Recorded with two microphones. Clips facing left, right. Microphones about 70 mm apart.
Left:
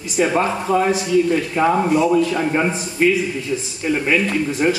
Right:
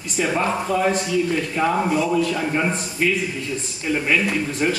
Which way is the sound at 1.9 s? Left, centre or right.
Centre.